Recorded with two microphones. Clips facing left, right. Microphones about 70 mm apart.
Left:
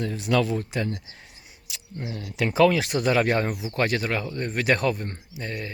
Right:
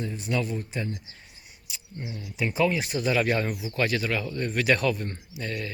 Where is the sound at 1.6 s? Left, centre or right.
Left.